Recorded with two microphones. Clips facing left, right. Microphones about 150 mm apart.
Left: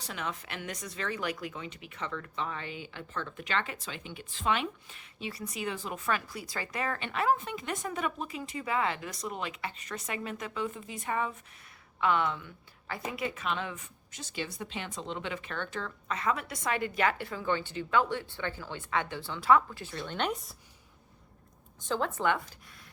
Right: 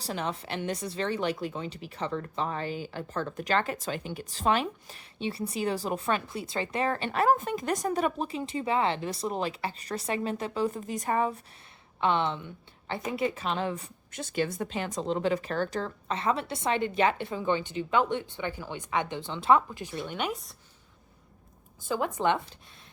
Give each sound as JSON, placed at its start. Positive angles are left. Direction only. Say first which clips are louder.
{"t": 0.0, "sound": "speech", "louder": "right 5 dB", "side_deg": -35}
{"t": 11.9, "sound": "a woman's voice", "louder": "right 2 dB", "side_deg": -25}
{"t": 14.1, "sound": "a woman's voice", "louder": "right 8 dB", "side_deg": -55}
{"t": 21.8, "sound": "a woman's voice", "louder": "right 2 dB", "side_deg": -15}